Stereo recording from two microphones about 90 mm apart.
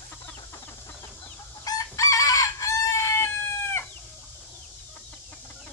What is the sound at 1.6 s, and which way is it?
Crowing, 40° left (ahead or behind).